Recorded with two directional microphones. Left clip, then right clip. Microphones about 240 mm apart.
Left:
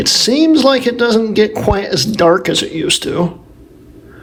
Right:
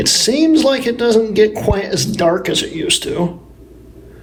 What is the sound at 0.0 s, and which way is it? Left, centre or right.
Speech, centre.